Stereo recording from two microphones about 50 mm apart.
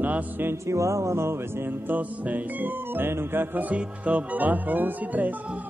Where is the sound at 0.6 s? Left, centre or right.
Right.